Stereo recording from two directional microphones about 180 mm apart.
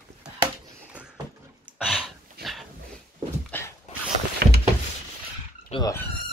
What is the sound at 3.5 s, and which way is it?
Dog, 10° left (ahead or behind).